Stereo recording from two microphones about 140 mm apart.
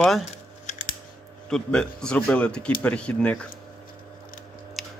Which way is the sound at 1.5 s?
5° left (ahead or behind).